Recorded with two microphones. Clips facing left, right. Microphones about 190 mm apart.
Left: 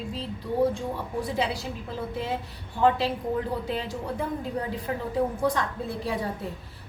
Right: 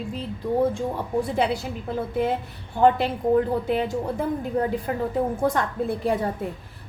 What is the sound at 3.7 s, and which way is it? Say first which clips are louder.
Speech: right 7 dB; 55° right (ahead or behind).